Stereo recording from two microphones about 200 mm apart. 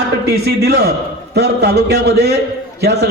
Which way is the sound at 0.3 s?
55° right (ahead or behind).